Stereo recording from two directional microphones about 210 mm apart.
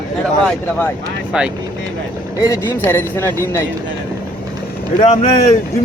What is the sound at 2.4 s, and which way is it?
Speech, 15° left (ahead or behind).